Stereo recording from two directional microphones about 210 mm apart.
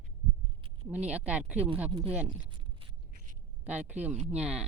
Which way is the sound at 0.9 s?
5° right (ahead or behind).